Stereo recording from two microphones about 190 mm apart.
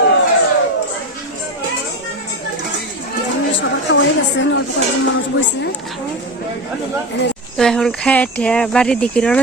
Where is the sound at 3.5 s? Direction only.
75° left (ahead or behind).